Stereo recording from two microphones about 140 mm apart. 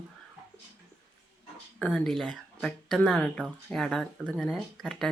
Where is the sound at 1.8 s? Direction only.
5° left (ahead or behind).